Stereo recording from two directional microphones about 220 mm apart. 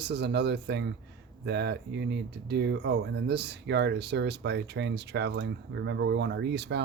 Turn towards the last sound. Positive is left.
turn(degrees=-50)  # may be behind; listen again after turning